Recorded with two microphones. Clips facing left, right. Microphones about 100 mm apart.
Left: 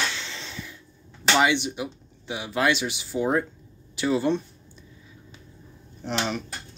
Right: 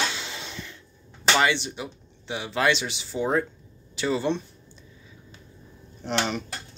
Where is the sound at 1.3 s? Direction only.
15° left (ahead or behind).